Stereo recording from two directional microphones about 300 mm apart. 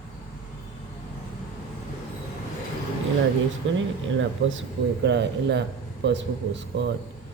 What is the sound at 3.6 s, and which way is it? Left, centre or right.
Speech, right.